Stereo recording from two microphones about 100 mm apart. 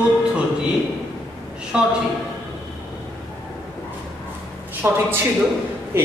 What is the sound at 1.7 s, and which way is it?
Speech, 10° right (ahead or behind).